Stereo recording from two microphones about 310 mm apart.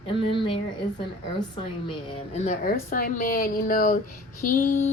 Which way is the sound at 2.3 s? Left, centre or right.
Left.